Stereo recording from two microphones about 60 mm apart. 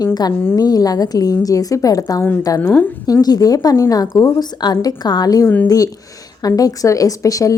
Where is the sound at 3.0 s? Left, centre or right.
Left.